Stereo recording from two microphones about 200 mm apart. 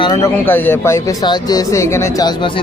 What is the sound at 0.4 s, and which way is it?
Speech, 10° left (ahead or behind).